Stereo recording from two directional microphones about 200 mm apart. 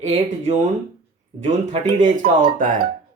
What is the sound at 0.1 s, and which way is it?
Speech, 35° right (ahead or behind).